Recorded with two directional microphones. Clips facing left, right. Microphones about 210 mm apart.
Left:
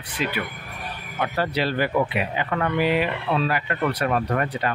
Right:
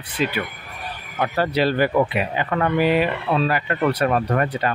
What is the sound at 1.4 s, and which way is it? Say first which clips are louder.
Speech: right 5 dB; 40° right (ahead or behind).